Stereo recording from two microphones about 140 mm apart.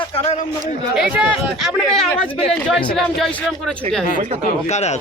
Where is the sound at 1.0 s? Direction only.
10° right (ahead or behind).